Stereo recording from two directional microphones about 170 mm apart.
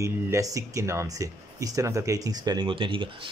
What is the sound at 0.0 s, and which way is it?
Speech, 20° right (ahead or behind).